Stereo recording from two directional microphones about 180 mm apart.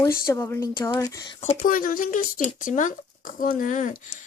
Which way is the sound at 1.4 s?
40° left (ahead or behind).